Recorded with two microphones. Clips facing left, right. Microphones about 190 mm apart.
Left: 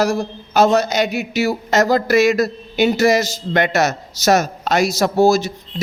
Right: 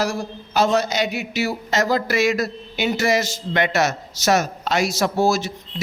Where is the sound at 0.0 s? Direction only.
45° left (ahead or behind).